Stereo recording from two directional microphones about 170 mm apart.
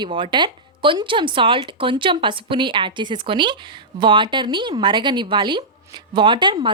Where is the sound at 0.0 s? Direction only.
30° right (ahead or behind).